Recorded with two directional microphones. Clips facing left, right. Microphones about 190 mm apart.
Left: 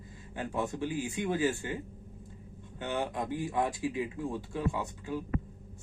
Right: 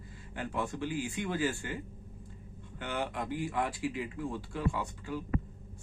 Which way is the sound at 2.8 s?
20° left (ahead or behind).